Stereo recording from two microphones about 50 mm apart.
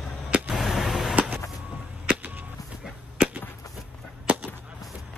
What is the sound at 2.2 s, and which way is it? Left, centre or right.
Whip, right.